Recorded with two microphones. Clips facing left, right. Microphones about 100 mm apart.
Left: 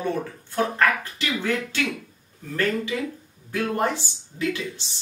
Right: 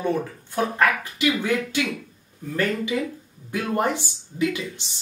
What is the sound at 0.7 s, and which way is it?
Speech, 15° right (ahead or behind).